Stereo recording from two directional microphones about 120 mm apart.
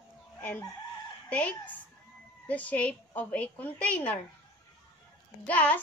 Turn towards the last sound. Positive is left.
turn(degrees=15)  # may be behind; listen again after turning